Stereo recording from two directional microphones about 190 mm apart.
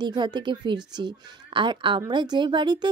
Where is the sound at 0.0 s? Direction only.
25° right (ahead or behind).